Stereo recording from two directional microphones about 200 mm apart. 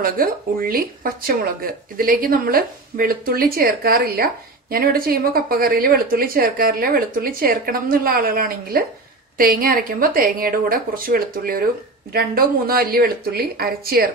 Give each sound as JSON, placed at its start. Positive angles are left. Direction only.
{"t": 0.0, "sound": "speech", "side_deg": -45}